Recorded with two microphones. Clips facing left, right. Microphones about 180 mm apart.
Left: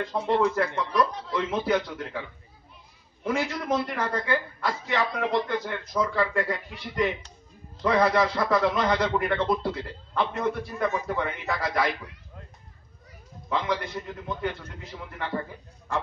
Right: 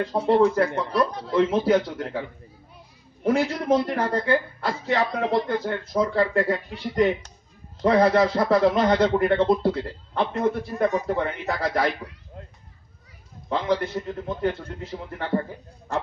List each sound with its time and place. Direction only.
0.0 s a man's voice: 35° right (ahead or behind)
7.8 s a man's voice: 35° right (ahead or behind)
13.5 s a man's voice: 35° right (ahead or behind)